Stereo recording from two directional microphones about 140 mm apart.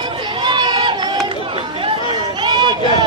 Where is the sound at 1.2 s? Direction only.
35° right (ahead or behind).